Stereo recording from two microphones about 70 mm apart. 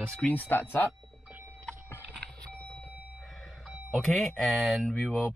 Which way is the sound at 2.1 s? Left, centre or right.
Centre.